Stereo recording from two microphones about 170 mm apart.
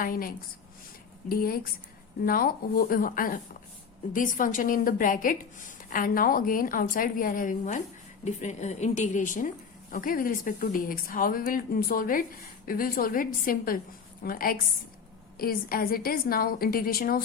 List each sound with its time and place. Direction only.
0.0 s a woman's voice: 55° left (ahead or behind)